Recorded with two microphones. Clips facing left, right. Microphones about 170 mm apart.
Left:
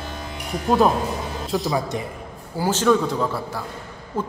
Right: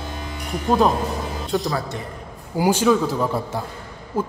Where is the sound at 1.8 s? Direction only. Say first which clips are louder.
Left 3 dB; 15° left (ahead or behind).